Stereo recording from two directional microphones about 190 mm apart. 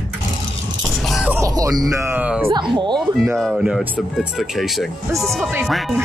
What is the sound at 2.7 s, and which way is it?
Speech, 25° right (ahead or behind).